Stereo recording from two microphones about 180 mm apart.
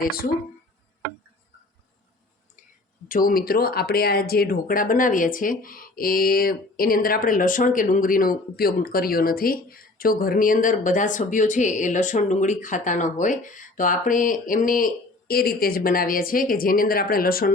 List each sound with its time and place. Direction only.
0.0 s speech: 55° left (ahead or behind)
3.1 s speech: 50° left (ahead or behind)